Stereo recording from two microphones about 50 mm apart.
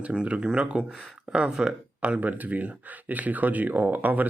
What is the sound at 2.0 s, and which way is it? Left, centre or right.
Speech, right.